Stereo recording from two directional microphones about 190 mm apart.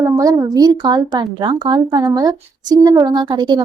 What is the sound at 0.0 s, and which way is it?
Speech, 15° right (ahead or behind).